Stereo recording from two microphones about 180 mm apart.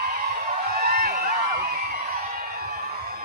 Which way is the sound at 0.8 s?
55° right (ahead or behind).